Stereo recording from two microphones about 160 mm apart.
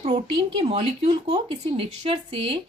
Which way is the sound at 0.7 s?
35° right (ahead or behind).